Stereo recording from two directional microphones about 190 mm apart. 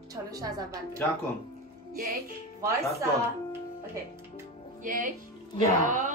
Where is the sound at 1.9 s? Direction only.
55° right (ahead or behind).